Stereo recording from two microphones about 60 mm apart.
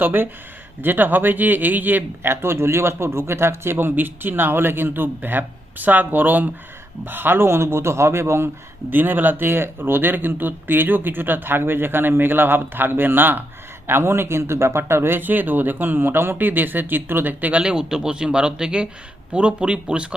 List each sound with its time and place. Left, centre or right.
0.0 s speech: right
8.9 s speech: right
17.6 s speech: centre